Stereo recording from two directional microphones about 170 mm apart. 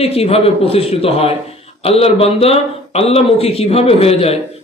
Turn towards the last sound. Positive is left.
turn(degrees=35)  # may be behind; listen again after turning